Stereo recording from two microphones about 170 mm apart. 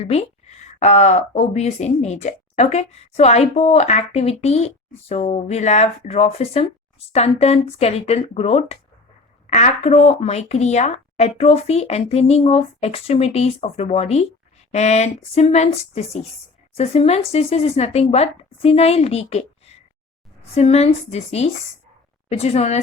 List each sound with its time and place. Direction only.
0.0 s speech: 35° left (ahead or behind)